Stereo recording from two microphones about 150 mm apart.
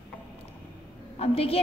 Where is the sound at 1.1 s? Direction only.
40° left (ahead or behind).